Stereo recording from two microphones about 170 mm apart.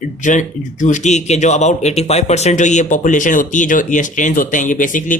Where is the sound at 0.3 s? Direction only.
45° left (ahead or behind).